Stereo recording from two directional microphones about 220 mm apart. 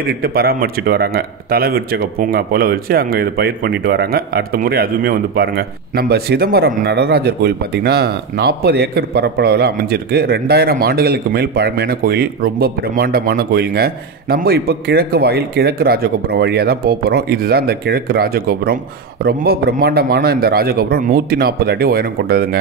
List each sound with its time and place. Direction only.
0.2 s a man's voice: 45° right (ahead or behind)